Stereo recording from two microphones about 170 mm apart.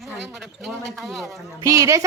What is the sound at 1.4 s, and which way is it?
Speech, 20° right (ahead or behind).